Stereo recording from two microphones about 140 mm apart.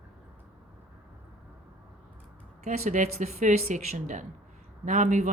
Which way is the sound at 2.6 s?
55° right (ahead or behind).